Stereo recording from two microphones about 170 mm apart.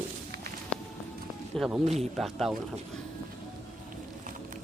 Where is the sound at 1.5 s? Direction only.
Centre (ahead or behind).